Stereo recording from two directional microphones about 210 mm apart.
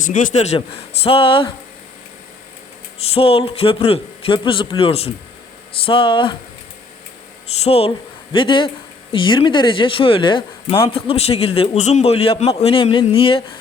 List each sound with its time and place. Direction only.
0.0 s speech: 40° left (ahead or behind)
3.1 s speech: 25° left (ahead or behind)
7.6 s speech: 30° left (ahead or behind)